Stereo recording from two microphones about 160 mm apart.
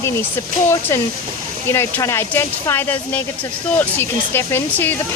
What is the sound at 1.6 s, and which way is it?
Speech, 15° left (ahead or behind).